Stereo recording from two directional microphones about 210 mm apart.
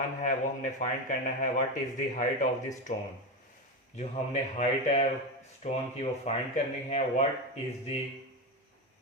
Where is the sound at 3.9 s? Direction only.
35° left (ahead or behind).